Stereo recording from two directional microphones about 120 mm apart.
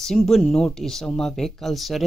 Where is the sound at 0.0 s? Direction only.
Centre (ahead or behind).